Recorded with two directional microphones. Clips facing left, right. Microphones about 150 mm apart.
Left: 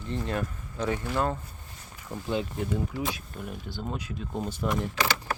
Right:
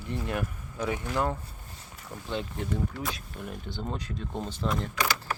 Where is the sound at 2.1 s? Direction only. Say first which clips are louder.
Left 4 dB; 5° left (ahead or behind).